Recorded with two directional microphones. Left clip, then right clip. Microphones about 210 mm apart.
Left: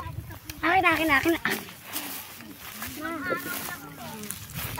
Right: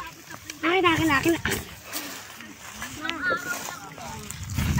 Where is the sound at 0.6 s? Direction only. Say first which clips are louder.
Even; 40° left (ahead or behind).